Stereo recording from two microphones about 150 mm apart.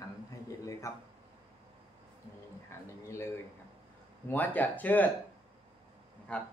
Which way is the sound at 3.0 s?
20° left (ahead or behind).